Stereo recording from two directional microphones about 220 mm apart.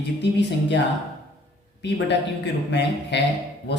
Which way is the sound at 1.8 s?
50° left (ahead or behind).